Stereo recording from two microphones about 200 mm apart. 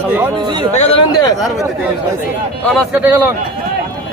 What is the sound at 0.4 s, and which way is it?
Speech, 20° right (ahead or behind).